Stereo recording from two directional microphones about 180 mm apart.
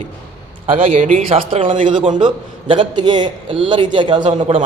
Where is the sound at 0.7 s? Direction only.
45° right (ahead or behind).